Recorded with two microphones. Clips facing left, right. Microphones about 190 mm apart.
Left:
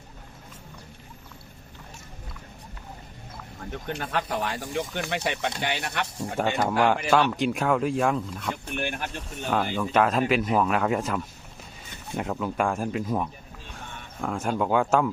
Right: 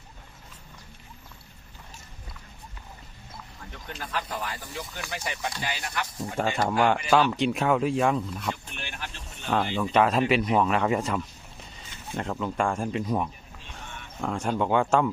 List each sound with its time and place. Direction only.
3.8 s speech: 60° left (ahead or behind)
6.3 s speech: centre (ahead or behind)
8.7 s speech: 55° left (ahead or behind)
9.5 s speech: centre (ahead or behind)